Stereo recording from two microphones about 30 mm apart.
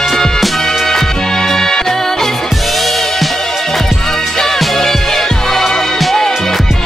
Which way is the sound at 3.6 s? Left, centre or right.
Centre.